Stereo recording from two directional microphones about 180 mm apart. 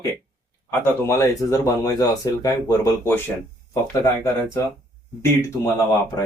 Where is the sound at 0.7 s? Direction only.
15° left (ahead or behind).